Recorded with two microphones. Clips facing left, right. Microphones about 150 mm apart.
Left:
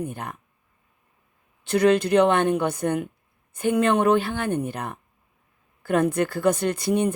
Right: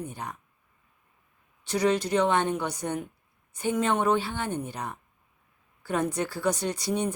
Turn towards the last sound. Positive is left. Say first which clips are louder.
# left 6 dB
turn(degrees=55)  # may be behind; listen again after turning